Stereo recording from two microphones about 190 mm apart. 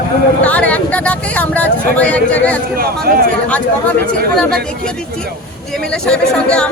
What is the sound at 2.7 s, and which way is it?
Speech, 50° right (ahead or behind).